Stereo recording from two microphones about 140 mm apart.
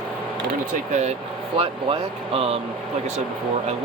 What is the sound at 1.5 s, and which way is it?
Speech, 40° right (ahead or behind).